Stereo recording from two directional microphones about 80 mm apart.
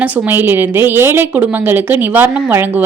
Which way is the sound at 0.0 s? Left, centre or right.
Right.